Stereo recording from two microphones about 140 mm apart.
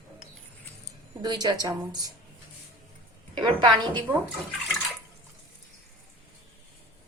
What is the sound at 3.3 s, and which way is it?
Speech, 35° right (ahead or behind).